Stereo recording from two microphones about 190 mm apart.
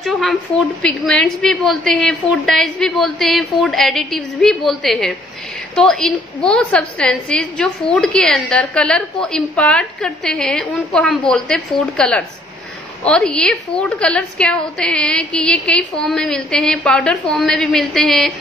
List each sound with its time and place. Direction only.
0.0 s a woman's voice: centre (ahead or behind)